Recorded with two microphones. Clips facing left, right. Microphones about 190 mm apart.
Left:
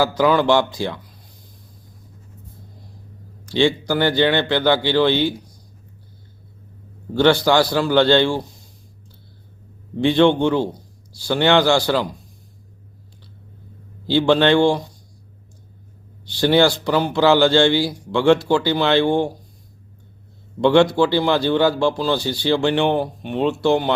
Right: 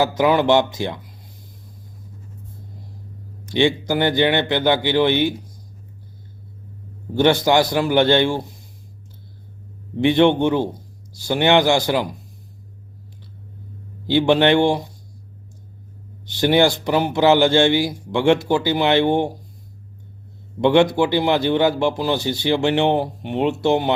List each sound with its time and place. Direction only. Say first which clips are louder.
0.0 s a man's voice: even; 20° right (ahead or behind)
3.4 s a man's voice: even; 20° right (ahead or behind)
7.1 s a man's voice: left 1 dB; 20° right (ahead or behind)
10.0 s a man's voice: even; 20° right (ahead or behind)
14.1 s a man's voice: even; 20° right (ahead or behind)
16.2 s a man's voice: even; 20° right (ahead or behind)
20.6 s a man's voice: left 1 dB; 20° right (ahead or behind)